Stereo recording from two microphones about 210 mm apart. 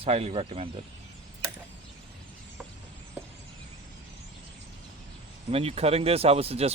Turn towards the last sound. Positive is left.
turn(degrees=-30)  # may be behind; listen again after turning